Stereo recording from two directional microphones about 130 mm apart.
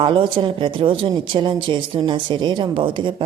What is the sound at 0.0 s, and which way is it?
Speech, 40° right (ahead or behind).